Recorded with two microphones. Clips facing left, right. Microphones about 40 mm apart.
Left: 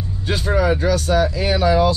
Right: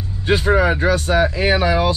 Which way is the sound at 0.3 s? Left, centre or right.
Right.